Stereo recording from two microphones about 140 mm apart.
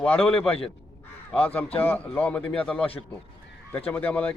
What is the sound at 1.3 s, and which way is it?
Speech, 15° left (ahead or behind).